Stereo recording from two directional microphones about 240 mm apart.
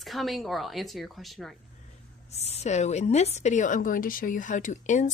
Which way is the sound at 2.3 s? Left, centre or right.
Left.